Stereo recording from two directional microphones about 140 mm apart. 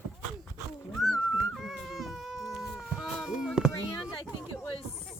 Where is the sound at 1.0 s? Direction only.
Centre (ahead or behind).